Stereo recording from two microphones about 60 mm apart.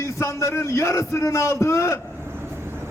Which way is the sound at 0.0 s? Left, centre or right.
Left.